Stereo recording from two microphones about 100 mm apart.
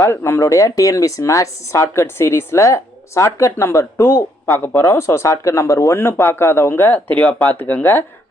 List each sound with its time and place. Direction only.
0.0 s speech: 25° left (ahead or behind)